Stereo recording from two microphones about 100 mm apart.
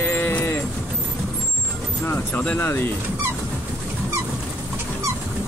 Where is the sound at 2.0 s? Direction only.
15° left (ahead or behind).